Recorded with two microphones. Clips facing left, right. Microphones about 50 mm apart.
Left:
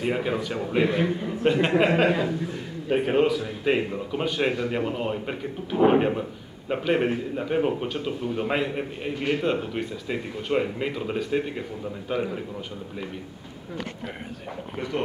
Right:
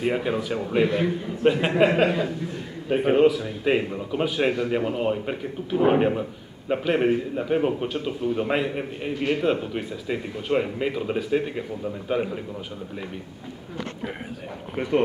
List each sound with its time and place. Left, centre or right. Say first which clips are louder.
0.0 s a man's voice: right 1 dB; centre
14.8 s speech: right 4 dB; right